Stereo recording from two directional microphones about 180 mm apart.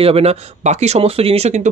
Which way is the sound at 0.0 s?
35° right (ahead or behind).